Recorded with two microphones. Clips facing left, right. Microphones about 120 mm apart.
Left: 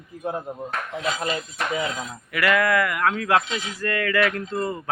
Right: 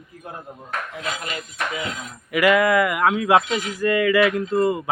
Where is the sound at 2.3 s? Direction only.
15° right (ahead or behind).